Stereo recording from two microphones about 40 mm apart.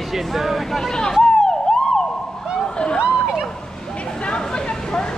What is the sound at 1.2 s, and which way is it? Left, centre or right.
Emergency vehicle, centre.